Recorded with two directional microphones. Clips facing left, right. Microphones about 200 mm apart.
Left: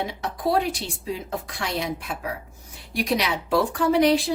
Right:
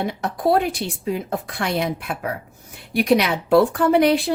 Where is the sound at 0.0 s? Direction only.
55° right (ahead or behind).